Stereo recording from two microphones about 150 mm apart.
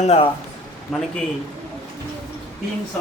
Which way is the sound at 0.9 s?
Centre (ahead or behind).